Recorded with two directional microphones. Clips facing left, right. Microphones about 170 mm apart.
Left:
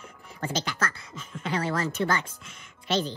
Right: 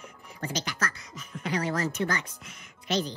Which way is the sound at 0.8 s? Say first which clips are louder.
Left 2 dB; 30° left (ahead or behind).